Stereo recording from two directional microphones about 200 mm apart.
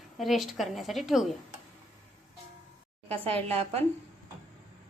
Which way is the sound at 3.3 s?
30° right (ahead or behind).